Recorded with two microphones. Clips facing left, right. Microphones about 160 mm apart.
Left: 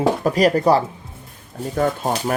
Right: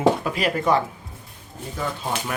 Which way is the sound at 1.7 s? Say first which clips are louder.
Left 7 dB; 50° left (ahead or behind).